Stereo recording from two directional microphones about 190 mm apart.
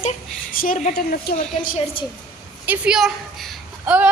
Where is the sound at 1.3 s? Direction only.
55° left (ahead or behind).